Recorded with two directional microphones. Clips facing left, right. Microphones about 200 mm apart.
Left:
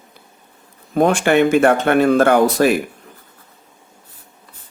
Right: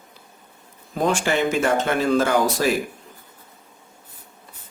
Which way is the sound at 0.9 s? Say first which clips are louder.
Left 7 dB; 60° left (ahead or behind).